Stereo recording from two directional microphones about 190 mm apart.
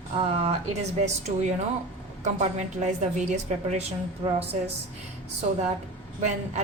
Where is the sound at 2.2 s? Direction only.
35° right (ahead or behind).